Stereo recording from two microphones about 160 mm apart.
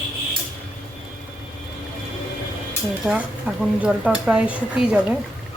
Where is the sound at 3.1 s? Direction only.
5° right (ahead or behind).